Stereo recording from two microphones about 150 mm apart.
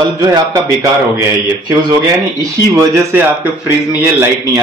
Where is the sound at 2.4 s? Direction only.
20° right (ahead or behind).